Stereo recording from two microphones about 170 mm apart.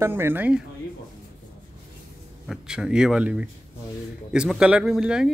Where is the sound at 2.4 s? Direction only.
5° right (ahead or behind).